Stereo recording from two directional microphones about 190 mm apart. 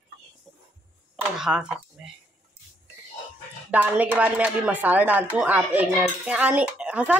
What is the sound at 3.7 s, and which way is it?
Speech, 10° right (ahead or behind).